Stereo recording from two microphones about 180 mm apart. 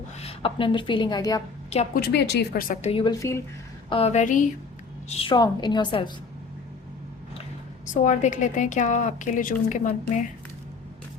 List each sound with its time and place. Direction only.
0.2 s a woman's voice: 30° left (ahead or behind)
1.9 s speech: 60° left (ahead or behind)
2.8 s a woman's voice: 30° left (ahead or behind)
3.8 s a woman's voice: 35° left (ahead or behind)
5.0 s a woman's voice: 35° left (ahead or behind)
8.0 s a woman's voice: 40° left (ahead or behind)